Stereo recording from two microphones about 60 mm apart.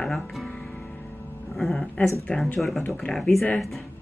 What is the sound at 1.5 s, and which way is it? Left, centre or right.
Speech, centre.